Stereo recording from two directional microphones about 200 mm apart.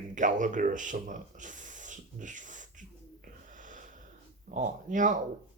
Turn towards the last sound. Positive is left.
turn(degrees=-40)  # may be behind; listen again after turning